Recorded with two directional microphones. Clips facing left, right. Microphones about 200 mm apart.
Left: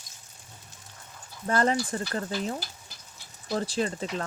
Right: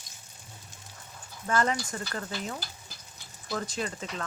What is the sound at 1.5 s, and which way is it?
Speech, 35° left (ahead or behind).